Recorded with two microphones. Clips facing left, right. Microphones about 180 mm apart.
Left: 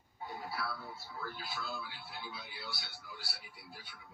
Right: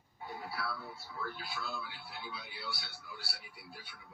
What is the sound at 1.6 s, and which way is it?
Speech, 40° right (ahead or behind).